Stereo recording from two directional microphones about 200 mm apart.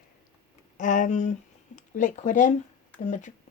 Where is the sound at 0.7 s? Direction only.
40° left (ahead or behind).